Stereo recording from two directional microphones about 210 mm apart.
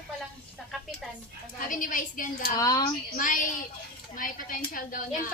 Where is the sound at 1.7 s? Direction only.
40° left (ahead or behind).